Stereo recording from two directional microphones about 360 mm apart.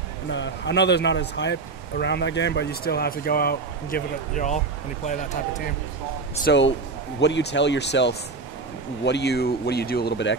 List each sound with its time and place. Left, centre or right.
0.3 s speech: left